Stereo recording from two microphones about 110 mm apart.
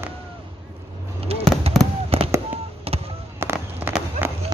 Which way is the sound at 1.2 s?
65° right (ahead or behind).